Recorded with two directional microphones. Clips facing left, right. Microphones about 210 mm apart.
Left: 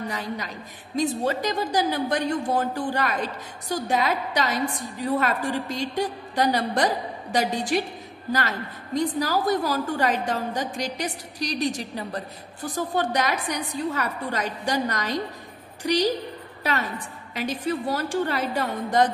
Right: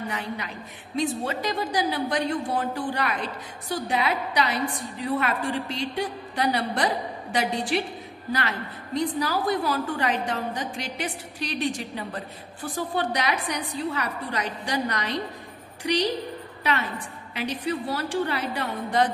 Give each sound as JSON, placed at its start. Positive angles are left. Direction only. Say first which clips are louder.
{"t": 0.1, "sound": "a woman's voice", "louder": "left 1 dB", "side_deg": 40}
{"t": 17.3, "sound": "a woman's voice", "louder": "left 1 dB", "side_deg": 45}